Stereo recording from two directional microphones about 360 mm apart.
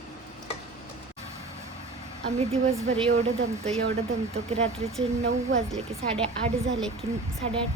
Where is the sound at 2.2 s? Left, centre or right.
Centre.